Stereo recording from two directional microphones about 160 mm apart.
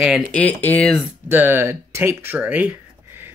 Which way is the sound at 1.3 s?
15° right (ahead or behind).